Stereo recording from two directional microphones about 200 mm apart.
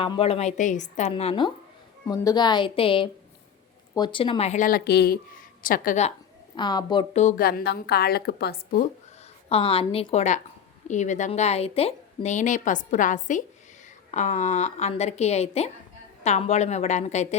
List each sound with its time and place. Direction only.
0.0 s a woman's voice: 30° left (ahead or behind)
1.1 s a woman's voice: 25° left (ahead or behind)
6.6 s a woman's voice: 20° left (ahead or behind)
7.1 s a woman's voice: 35° left (ahead or behind)
9.5 s a woman's voice: 30° left (ahead or behind)